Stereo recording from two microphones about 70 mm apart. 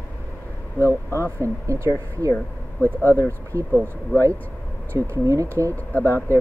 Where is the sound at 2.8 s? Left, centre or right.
Left.